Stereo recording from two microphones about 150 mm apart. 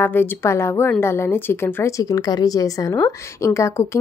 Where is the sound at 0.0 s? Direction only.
15° left (ahead or behind).